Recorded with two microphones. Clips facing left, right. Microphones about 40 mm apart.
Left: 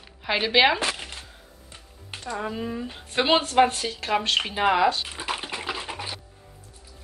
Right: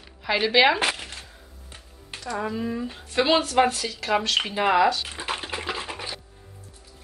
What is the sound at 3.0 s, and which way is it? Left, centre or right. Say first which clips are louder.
Speech: even; left.